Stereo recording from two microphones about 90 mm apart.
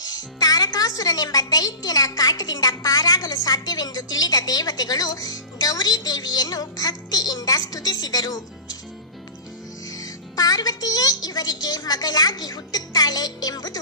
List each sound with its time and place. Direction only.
0.4 s a woman's voice: 45° left (ahead or behind)
9.8 s a woman's voice: 45° left (ahead or behind)